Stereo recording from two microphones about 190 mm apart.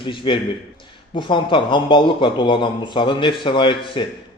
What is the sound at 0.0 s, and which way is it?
A man's voice, 25° left (ahead or behind).